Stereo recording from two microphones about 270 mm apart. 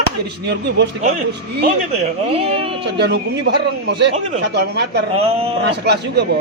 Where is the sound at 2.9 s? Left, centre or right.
Right.